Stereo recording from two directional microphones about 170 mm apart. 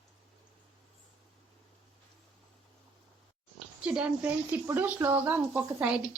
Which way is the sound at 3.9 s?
5° right (ahead or behind).